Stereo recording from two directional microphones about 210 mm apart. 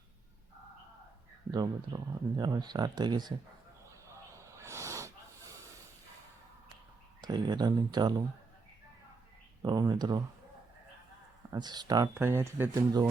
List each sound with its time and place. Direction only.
1.5 s speech: 20° right (ahead or behind)
4.0 s snake: 15° right (ahead or behind)
7.2 s speech: 20° right (ahead or behind)
9.6 s speech: 20° right (ahead or behind)
11.5 s speech: 20° right (ahead or behind)